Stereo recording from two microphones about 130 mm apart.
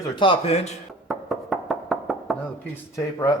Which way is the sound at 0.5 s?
55° left (ahead or behind).